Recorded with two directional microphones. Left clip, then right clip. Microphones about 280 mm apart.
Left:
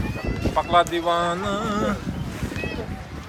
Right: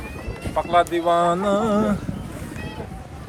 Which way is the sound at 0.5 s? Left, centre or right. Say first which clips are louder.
Right 1 dB; centre.